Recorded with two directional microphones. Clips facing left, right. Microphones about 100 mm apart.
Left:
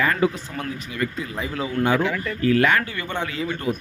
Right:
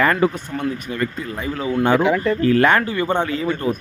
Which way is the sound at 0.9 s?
40° right (ahead or behind).